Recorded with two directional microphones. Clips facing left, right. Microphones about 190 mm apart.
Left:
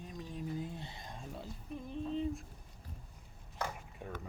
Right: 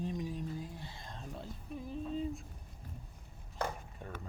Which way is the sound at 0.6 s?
20° left (ahead or behind).